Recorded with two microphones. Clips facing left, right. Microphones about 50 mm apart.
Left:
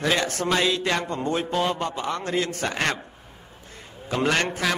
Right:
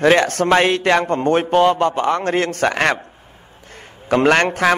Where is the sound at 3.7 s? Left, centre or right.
Right.